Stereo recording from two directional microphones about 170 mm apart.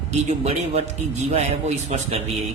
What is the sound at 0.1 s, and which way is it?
Speech, 40° right (ahead or behind).